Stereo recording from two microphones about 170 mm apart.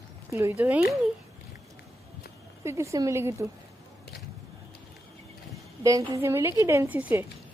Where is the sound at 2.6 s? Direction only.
15° right (ahead or behind).